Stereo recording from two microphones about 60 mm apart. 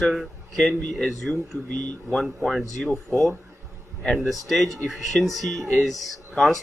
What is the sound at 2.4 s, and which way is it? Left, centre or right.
Speech, centre.